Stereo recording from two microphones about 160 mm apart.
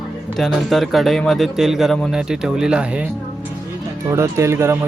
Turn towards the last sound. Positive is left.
turn(degrees=-15)  # may be behind; listen again after turning